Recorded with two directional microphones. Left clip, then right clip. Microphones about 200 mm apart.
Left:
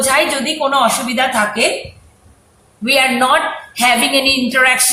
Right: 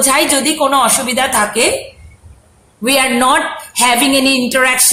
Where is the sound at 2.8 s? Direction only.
50° right (ahead or behind).